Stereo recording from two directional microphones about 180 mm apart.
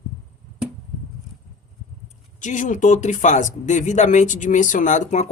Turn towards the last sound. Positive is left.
turn(degrees=40)  # may be behind; listen again after turning